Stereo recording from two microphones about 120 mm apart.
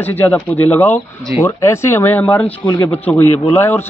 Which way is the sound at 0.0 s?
15° left (ahead or behind).